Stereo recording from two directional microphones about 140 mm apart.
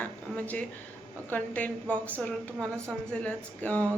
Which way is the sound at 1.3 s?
10° left (ahead or behind).